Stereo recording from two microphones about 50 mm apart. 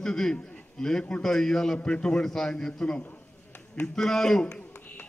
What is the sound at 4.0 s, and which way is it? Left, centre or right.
Speech, centre.